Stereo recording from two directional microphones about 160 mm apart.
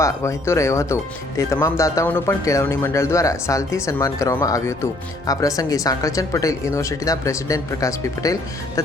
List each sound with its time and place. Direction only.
0.0 s speech: 20° left (ahead or behind)